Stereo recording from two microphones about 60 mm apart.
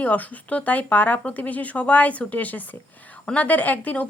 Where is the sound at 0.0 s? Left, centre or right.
Left.